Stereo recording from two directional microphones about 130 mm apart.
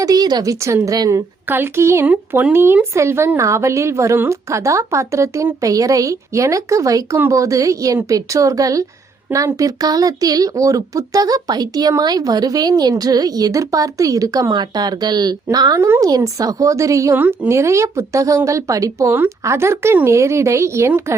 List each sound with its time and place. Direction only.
0.0 s speech: 30° right (ahead or behind)
1.5 s speech: 15° right (ahead or behind)